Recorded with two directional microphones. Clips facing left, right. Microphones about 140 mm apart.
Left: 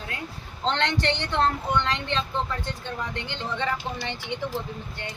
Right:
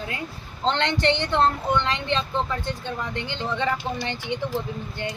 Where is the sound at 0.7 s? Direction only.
Centre (ahead or behind).